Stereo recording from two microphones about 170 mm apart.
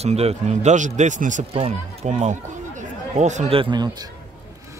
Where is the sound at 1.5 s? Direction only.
35° right (ahead or behind).